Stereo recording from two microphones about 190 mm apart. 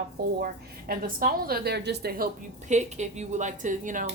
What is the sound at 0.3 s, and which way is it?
A woman's voice, 50° right (ahead or behind).